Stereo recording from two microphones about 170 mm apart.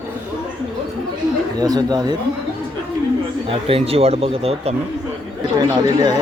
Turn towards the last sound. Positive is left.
turn(degrees=-25)  # may be behind; listen again after turning